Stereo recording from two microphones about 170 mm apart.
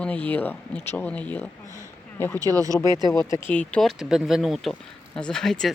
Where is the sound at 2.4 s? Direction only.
20° right (ahead or behind).